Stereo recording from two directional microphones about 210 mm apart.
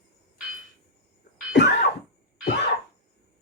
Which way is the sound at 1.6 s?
55° left (ahead or behind).